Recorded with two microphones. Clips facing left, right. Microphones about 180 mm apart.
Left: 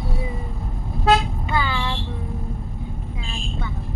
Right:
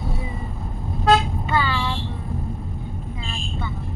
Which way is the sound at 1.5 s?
15° left (ahead or behind).